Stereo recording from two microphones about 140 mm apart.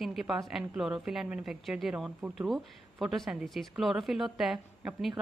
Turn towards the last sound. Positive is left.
turn(degrees=0)  # may be behind; listen again after turning